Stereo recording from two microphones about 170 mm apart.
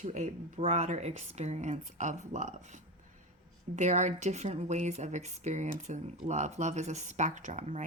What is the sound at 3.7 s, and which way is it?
Speech, 45° right (ahead or behind).